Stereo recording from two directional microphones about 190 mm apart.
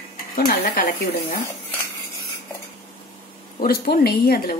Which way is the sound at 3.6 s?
50° left (ahead or behind).